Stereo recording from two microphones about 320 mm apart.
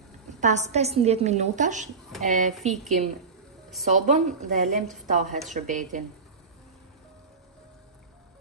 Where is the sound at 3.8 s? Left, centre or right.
Right.